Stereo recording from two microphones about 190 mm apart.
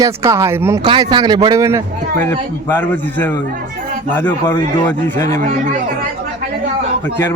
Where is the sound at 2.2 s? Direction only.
10° left (ahead or behind).